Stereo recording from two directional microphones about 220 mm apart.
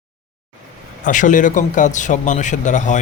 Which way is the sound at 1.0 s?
35° left (ahead or behind).